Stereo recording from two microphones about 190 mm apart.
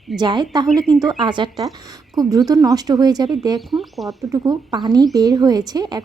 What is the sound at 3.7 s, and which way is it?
Speech, centre (ahead or behind).